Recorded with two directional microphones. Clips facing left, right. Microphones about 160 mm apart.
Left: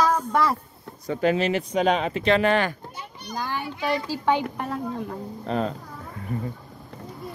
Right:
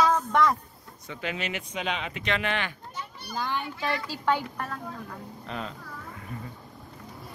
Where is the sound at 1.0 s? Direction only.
40° left (ahead or behind).